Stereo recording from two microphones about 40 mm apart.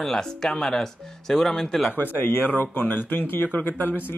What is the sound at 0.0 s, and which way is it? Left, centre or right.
Speech, centre.